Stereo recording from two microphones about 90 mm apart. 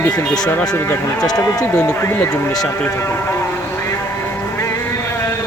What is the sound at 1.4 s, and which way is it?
Speech, 40° left (ahead or behind).